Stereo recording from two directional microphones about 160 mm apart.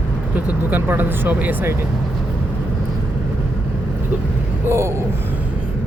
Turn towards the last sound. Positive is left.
turn(degrees=-15)  # may be behind; listen again after turning